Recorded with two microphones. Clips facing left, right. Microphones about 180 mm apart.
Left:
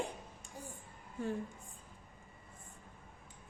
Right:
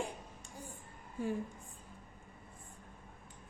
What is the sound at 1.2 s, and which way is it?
Speech, 10° right (ahead or behind).